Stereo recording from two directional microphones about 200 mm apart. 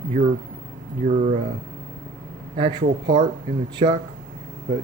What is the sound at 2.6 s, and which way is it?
Speech, 20° right (ahead or behind).